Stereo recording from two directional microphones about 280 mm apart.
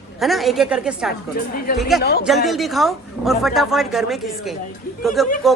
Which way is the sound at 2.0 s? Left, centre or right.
Left.